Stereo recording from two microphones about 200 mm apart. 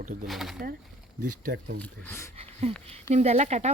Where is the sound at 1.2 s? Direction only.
45° right (ahead or behind).